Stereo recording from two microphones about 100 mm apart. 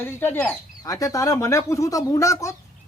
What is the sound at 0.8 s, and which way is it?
Speech, 35° left (ahead or behind).